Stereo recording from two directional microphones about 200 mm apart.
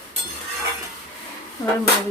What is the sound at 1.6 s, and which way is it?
Dishes, 20° left (ahead or behind).